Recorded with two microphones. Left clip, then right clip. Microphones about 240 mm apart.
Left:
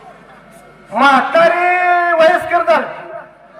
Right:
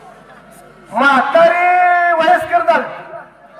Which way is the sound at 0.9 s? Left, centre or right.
Left.